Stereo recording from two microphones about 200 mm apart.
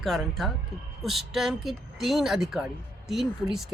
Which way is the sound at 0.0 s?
Centre (ahead or behind).